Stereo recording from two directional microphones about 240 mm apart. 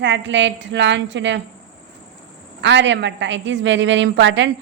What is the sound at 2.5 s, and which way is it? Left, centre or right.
A woman's voice, right.